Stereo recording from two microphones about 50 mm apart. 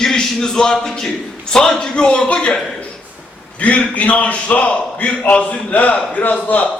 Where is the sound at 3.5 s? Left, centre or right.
Left.